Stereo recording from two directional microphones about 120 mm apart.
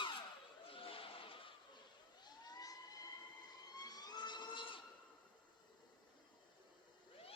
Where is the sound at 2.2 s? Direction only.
35° left (ahead or behind).